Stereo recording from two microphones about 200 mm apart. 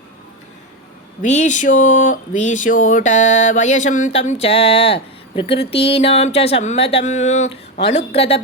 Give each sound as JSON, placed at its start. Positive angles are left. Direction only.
{"t": 1.2, "sound": "speech", "side_deg": 35}